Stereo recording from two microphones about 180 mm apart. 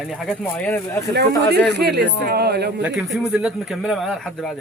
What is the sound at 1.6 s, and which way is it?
Speech, 65° right (ahead or behind).